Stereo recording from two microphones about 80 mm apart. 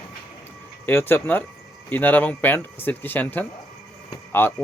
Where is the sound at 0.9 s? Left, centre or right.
Left.